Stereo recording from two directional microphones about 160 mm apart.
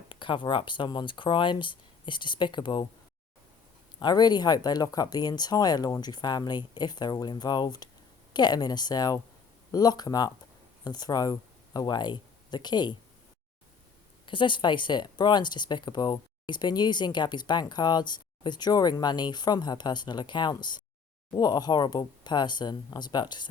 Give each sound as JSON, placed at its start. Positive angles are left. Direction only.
{"t": 0.1, "sound": "speech", "side_deg": 30}
{"t": 4.0, "sound": "speech", "side_deg": 25}
{"t": 14.3, "sound": "speech", "side_deg": 30}